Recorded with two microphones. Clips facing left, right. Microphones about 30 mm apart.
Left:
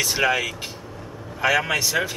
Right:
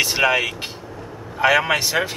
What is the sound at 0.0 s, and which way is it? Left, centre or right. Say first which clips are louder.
Speech: right 3 dB; right.